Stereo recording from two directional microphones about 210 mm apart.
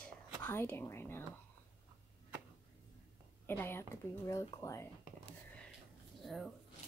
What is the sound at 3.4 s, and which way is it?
A woman's voice, 10° left (ahead or behind).